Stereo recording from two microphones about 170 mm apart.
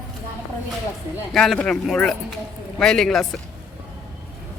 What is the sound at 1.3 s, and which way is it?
Speech, centre (ahead or behind).